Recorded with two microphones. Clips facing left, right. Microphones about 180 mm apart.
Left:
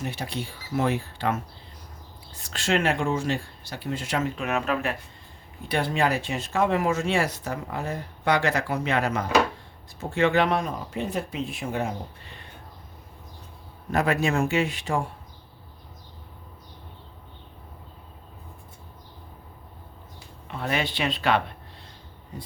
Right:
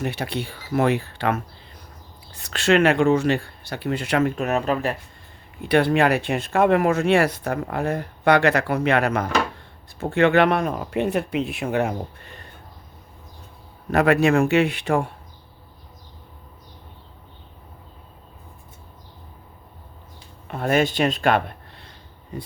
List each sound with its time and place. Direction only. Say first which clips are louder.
0.0 s speech: right 5 dB; 65° right (ahead or behind)
4.4 s speech: right 4 dB; 40° right (ahead or behind)
5.6 s speech: right 7 dB; 65° right (ahead or behind)
13.9 s speech: right 6 dB; 70° right (ahead or behind)
20.5 s speech: right 8 dB; 50° right (ahead or behind)